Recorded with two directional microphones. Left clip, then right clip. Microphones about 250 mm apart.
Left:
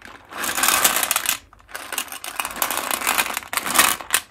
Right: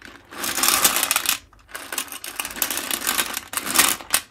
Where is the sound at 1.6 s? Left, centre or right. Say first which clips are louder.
Left 2 dB; centre.